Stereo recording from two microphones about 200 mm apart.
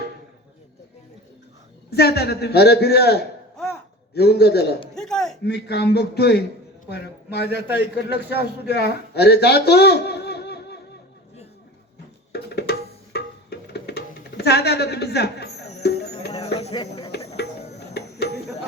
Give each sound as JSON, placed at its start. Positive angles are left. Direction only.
{"t": 1.9, "sound": "a man's voice", "side_deg": 55}
{"t": 4.9, "sound": "a sound", "side_deg": 5}
{"t": 5.5, "sound": "a man's voice", "side_deg": 55}
{"t": 12.3, "sound": "music", "side_deg": 55}
{"t": 16.3, "sound": "a sound", "side_deg": 30}
{"t": 17.1, "sound": "music", "side_deg": 55}